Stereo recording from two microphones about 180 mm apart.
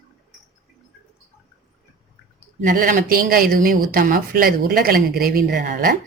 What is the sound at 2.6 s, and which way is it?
A woman's voice, 50° right (ahead or behind).